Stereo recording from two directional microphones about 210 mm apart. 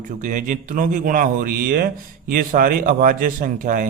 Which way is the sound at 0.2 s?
40° right (ahead or behind).